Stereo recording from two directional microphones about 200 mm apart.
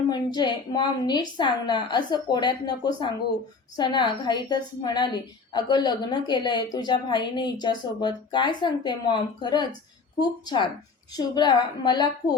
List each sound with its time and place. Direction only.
0.1 s a woman's voice: 20° left (ahead or behind)